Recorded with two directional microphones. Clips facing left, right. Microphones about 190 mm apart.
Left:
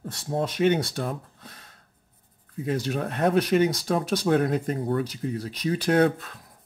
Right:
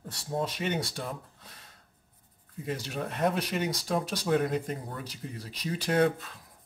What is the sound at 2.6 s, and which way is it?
Speech, 55° left (ahead or behind).